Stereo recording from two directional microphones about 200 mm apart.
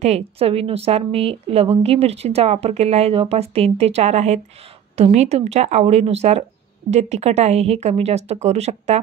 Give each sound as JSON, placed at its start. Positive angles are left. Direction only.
{"t": 0.0, "sound": "a woman's voice", "side_deg": -30}